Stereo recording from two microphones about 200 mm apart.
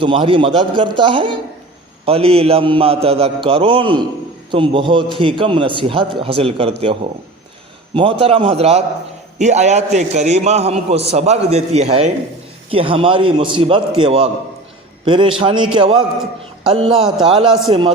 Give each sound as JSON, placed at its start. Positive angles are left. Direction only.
{"t": 0.0, "sound": "a man's voice", "side_deg": -25}
{"t": 8.2, "sound": "a man's voice", "side_deg": -30}